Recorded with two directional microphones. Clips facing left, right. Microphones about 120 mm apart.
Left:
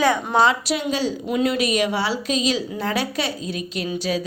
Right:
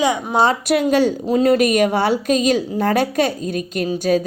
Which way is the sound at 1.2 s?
35° right (ahead or behind).